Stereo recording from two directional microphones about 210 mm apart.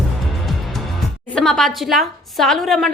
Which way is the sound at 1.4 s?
Centre (ahead or behind).